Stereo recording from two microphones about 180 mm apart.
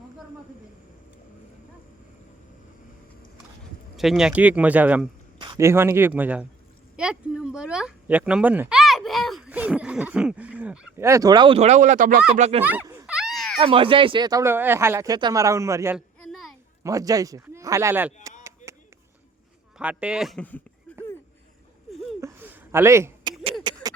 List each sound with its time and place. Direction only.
3.9 s a man's voice: centre (ahead or behind)
5.4 s a man's voice: 20° right (ahead or behind); by 12.2 s 50° right (ahead or behind)
12.4 s speech: 35° right (ahead or behind)
12.6 s speech: 15° right (ahead or behind)
13.1 s a sound: 5° right (ahead or behind)
13.6 s speech: 30° right (ahead or behind)
16.0 s a sound: centre (ahead or behind)
16.8 s speech: 20° right (ahead or behind)
19.8 s speech: 5° right (ahead or behind)
22.2 s a sound: 10° right (ahead or behind)